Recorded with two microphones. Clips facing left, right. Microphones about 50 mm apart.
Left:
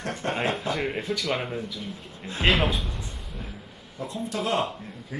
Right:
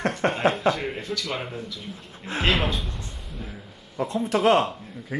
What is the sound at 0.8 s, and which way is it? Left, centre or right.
Speech, centre.